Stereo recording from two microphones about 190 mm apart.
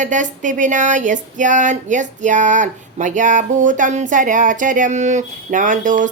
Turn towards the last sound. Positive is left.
turn(degrees=-45)  # may be behind; listen again after turning